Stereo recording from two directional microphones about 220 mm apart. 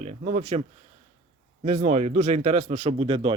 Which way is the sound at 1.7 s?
30° right (ahead or behind).